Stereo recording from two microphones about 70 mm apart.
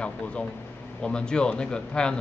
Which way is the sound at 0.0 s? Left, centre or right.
Centre.